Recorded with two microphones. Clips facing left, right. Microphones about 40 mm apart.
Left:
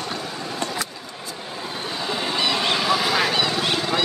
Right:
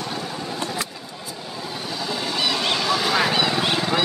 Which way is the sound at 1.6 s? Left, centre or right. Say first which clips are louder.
Left 1 dB; left.